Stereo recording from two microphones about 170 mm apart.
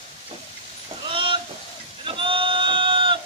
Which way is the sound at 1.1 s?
30° right (ahead or behind).